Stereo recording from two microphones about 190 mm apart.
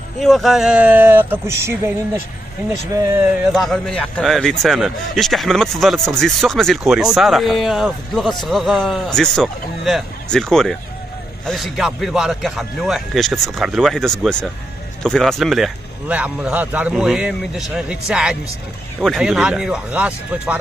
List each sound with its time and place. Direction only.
0.2 s speech: centre (ahead or behind); by 3.3 s 15° right (ahead or behind)
3.5 s a man's voice: centre (ahead or behind)